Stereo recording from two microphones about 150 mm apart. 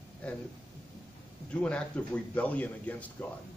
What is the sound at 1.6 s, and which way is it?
A man's voice, 5° left (ahead or behind).